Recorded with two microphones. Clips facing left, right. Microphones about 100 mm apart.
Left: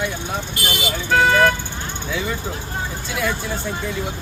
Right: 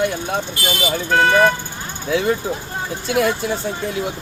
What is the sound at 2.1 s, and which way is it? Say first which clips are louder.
Speech: right 8 dB; 65° right (ahead or behind).